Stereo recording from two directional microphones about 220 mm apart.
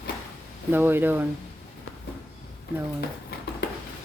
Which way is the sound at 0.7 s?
10° right (ahead or behind).